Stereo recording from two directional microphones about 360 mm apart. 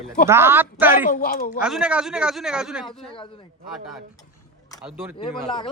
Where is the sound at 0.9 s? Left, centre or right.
Left.